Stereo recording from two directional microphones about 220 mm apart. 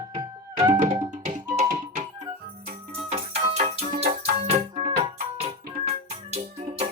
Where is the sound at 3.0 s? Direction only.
30° right (ahead or behind).